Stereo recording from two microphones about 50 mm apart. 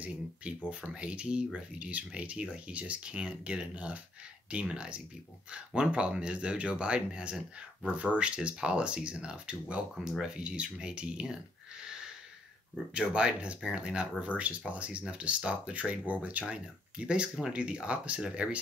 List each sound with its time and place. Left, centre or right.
0.0 s speech: right